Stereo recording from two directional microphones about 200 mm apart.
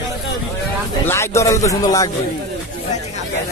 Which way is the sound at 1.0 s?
15° left (ahead or behind).